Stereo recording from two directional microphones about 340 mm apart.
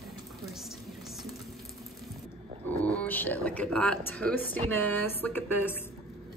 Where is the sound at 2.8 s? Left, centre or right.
Centre.